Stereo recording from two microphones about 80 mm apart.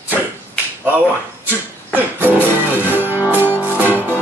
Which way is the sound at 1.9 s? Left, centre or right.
Right.